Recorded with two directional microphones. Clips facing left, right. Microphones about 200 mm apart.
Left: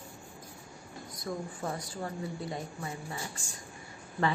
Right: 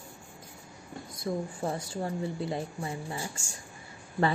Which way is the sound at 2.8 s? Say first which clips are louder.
Right 4 dB; 30° right (ahead or behind).